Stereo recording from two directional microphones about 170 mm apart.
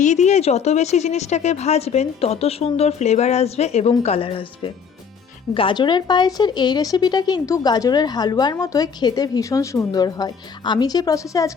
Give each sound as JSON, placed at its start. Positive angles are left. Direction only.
{"t": 0.0, "sound": "speech", "side_deg": 40}